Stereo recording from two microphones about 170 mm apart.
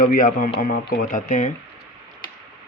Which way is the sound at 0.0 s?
55° left (ahead or behind).